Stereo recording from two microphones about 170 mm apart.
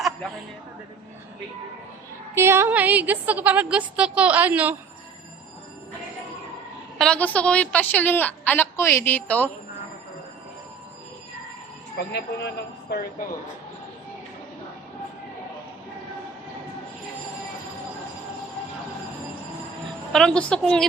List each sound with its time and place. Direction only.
2.3 s a woman's voice: 15° right (ahead or behind)
7.0 s a woman's voice: 5° left (ahead or behind)
11.9 s speech: 80° left
20.1 s a woman's voice: 5° left (ahead or behind)